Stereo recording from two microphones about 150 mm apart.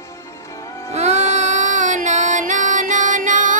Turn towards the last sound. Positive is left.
turn(degrees=-60)  # may be behind; listen again after turning